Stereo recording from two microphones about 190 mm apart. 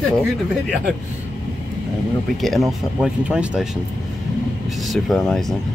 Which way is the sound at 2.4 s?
Centre (ahead or behind).